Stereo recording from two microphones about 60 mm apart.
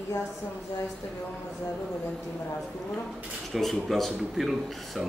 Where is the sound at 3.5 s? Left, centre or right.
Centre.